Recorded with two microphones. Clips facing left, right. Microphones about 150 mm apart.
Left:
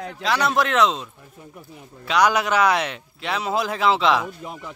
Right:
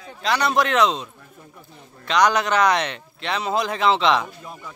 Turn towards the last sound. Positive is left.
turn(degrees=5)  # may be behind; listen again after turning